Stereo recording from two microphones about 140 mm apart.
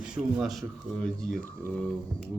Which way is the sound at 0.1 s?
5° right (ahead or behind).